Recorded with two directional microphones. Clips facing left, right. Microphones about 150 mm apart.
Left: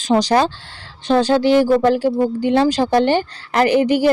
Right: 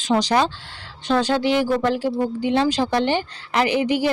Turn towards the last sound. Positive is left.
turn(degrees=45)  # may be behind; listen again after turning